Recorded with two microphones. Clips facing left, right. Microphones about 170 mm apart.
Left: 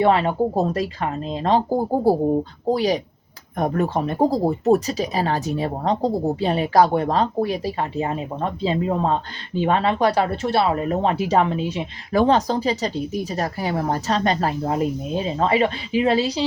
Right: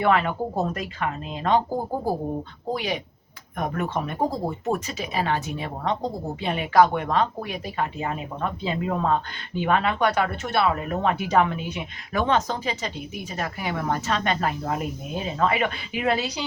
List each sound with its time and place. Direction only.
0.0 s speech: 30° left (ahead or behind)